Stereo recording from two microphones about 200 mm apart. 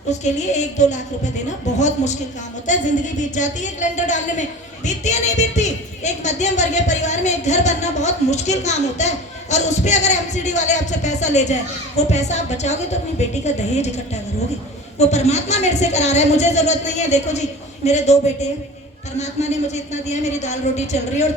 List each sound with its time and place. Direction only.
0.1 s a woman's voice: 35° left (ahead or behind)